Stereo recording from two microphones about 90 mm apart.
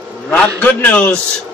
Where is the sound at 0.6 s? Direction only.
20° left (ahead or behind).